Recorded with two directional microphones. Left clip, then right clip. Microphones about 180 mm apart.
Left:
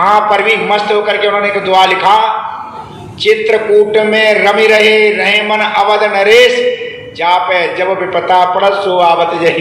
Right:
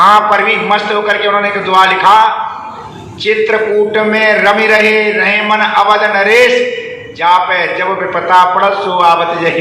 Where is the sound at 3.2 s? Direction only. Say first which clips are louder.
Left 1 dB; 20° left (ahead or behind).